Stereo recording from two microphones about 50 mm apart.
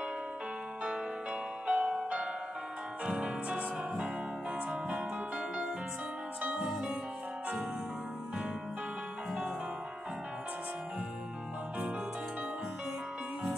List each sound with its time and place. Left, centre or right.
1.7 s music: right
6.4 s music: right